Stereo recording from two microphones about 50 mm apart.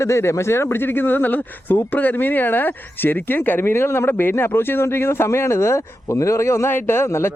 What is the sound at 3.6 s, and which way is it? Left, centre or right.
A man's voice, left.